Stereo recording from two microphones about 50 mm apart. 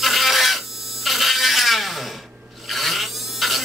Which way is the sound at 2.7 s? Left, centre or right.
Centre.